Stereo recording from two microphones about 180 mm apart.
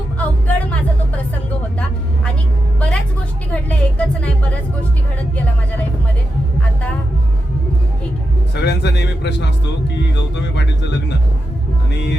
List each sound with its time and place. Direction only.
0.2 s music: 10° left (ahead or behind)
2.7 s music: 5° left (ahead or behind)
8.6 s music: 65° left (ahead or behind)